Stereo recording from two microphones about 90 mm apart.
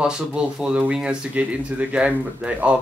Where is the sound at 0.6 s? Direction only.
10° right (ahead or behind).